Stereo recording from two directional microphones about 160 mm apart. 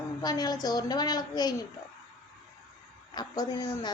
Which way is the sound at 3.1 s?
25° left (ahead or behind).